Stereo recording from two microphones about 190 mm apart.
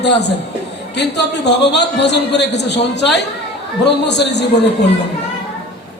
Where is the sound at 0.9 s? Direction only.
65° left (ahead or behind).